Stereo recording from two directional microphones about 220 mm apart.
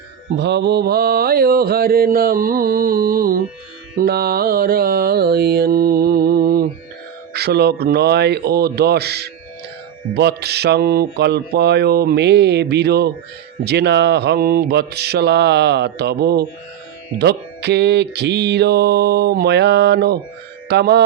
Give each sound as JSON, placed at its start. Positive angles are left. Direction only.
{"t": 0.3, "sound": "mantra", "side_deg": -50}